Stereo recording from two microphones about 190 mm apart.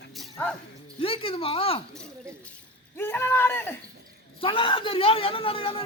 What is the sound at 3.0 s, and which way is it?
Speech, 10° left (ahead or behind).